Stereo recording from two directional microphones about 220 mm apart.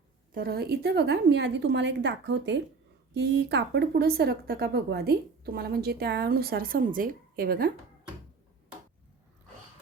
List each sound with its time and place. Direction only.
0.3 s speech: 45° right (ahead or behind)